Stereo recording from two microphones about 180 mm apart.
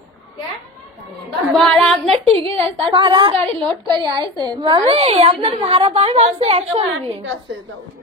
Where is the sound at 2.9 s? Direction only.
25° right (ahead or behind).